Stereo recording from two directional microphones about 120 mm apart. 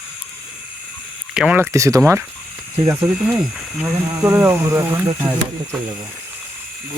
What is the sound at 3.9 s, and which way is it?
Speech, 20° right (ahead or behind).